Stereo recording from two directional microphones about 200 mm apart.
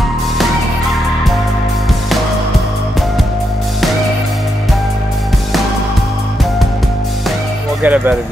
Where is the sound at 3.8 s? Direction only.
Centre (ahead or behind).